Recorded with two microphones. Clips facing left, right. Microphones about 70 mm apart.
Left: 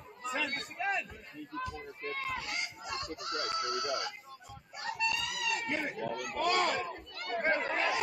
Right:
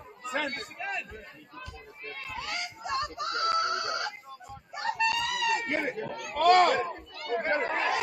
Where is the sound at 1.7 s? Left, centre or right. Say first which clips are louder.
Left 3 dB; left.